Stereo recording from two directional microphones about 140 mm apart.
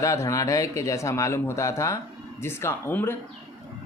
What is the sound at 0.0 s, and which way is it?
Speech, 20° left (ahead or behind).